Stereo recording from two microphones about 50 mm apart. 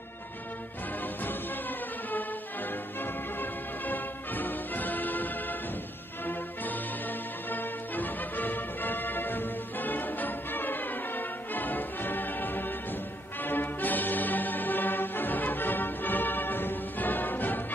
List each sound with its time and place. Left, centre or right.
3.3 s music: left
7.5 s music: left